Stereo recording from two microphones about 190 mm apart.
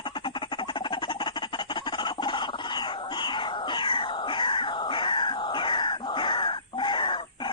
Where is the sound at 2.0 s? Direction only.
25° left (ahead or behind).